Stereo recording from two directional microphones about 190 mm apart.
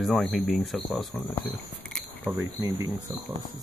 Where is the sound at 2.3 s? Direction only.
20° right (ahead or behind).